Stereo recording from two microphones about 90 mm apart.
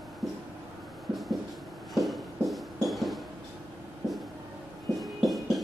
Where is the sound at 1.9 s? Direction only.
Centre (ahead or behind).